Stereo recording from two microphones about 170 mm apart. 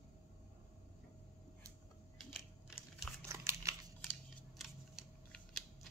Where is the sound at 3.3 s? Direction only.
15° right (ahead or behind).